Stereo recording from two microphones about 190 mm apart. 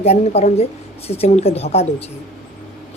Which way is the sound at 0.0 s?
35° left (ahead or behind).